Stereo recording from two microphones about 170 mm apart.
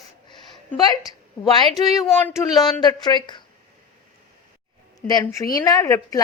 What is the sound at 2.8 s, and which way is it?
Speech, 25° left (ahead or behind).